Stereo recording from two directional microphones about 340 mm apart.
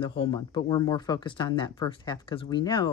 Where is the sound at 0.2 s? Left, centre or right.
Centre.